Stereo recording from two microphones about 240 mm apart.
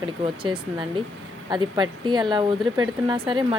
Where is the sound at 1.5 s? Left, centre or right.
Centre.